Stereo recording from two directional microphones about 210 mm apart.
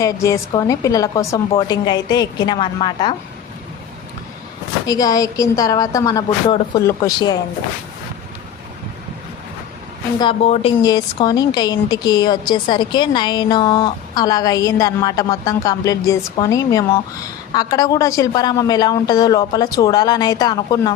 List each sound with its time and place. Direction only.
0.0 s a woman's voice: 15° left (ahead or behind)
4.9 s a woman's voice: 20° left (ahead or behind)
10.2 s a woman's voice: 25° left (ahead or behind)
10.8 s a woman's voice: 20° left (ahead or behind)